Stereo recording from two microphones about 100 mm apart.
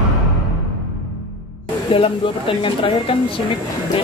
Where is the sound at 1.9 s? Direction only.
60° left (ahead or behind).